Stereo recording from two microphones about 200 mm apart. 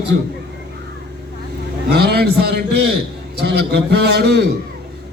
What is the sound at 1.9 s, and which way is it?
A man's voice, 55° right (ahead or behind).